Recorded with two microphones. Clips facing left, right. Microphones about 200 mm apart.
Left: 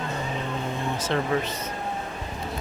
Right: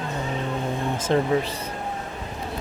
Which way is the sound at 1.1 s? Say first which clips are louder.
Right 5 dB; 30° right (ahead or behind).